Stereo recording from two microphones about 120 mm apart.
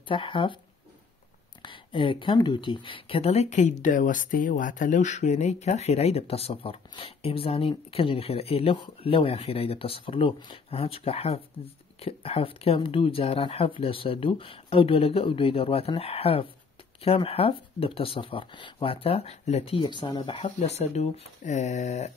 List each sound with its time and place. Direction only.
0.1 s speech: 45° left (ahead or behind)
1.6 s speech: 45° left (ahead or behind)
20.2 s speech: 55° left (ahead or behind); by 22.1 s 75° left (ahead or behind)